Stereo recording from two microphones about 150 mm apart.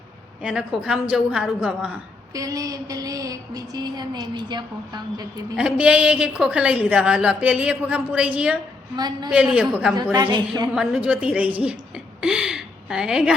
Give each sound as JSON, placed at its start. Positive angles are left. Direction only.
{"t": 0.4, "sound": "a woman's voice", "side_deg": -5}
{"t": 2.3, "sound": "a woman's voice", "side_deg": -20}
{"t": 5.5, "sound": "speech", "side_deg": -5}
{"t": 9.0, "sound": "a woman's voice", "side_deg": -25}
{"t": 9.3, "sound": "speech", "side_deg": -10}
{"t": 9.9, "sound": "a woman's voice", "side_deg": -25}
{"t": 10.8, "sound": "speech", "side_deg": -5}
{"t": 12.2, "sound": "gasp", "side_deg": -5}